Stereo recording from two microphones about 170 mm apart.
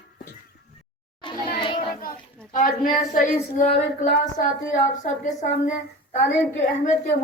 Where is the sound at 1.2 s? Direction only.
30° left (ahead or behind).